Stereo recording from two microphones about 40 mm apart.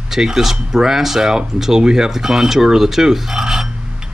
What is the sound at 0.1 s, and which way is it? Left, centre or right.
Speech, centre.